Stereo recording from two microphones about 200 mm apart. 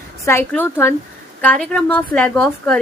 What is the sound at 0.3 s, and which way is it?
A woman's voice, 10° left (ahead or behind).